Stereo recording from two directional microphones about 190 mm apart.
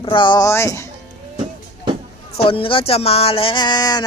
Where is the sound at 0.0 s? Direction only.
25° left (ahead or behind).